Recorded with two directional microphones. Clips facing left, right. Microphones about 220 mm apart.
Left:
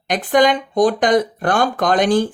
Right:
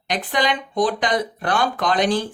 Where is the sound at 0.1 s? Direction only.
50° left (ahead or behind).